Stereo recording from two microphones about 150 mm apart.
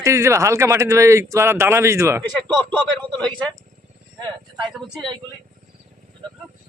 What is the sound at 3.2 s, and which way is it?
Speech, 10° left (ahead or behind).